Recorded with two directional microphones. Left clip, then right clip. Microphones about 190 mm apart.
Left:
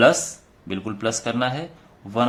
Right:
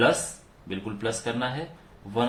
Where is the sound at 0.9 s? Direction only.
45° left (ahead or behind).